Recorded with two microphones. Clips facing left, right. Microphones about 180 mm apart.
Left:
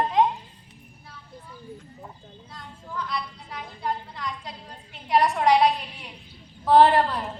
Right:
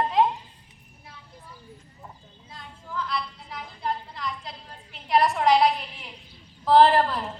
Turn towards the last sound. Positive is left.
turn(degrees=0)  # may be behind; listen again after turning